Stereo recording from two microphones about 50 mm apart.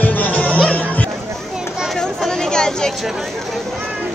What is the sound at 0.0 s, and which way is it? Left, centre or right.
Music, left.